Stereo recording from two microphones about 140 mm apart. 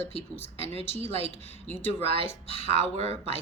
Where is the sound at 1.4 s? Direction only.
15° left (ahead or behind).